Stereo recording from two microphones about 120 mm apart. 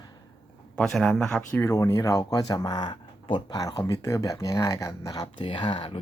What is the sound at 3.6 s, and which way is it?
Speech, 30° left (ahead or behind).